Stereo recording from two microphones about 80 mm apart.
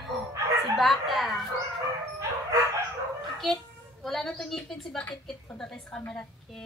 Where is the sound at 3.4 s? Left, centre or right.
Centre.